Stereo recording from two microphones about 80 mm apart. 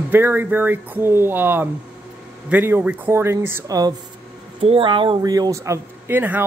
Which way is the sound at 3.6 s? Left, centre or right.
Right.